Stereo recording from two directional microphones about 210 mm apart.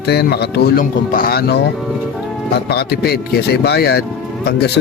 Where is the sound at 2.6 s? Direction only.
50° left (ahead or behind).